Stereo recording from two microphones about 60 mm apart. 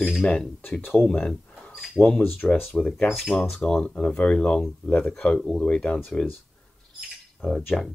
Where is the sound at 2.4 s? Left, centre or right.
Left.